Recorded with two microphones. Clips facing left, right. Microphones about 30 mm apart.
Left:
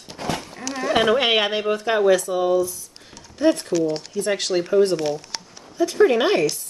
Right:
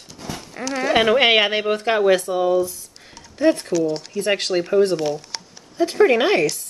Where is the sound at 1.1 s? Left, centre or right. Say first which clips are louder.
Right 3 dB; right.